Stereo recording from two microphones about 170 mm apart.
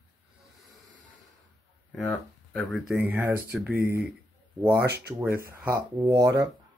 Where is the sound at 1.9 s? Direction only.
Centre (ahead or behind).